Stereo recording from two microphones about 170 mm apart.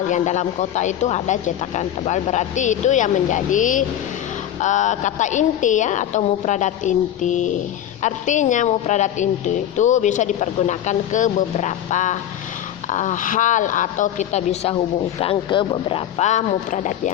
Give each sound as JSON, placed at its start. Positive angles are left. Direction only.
{"t": 0.1, "sound": "a woman's voice", "side_deg": 45}